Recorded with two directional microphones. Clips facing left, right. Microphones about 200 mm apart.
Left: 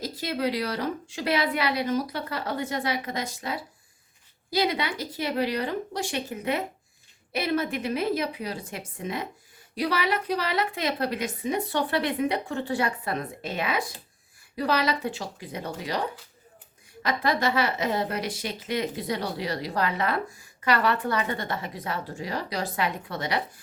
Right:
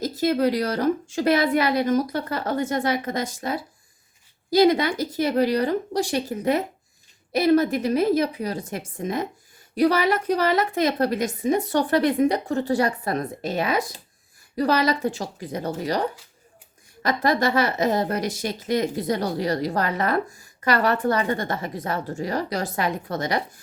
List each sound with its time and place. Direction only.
0.0 s a woman's voice: 45° right (ahead or behind)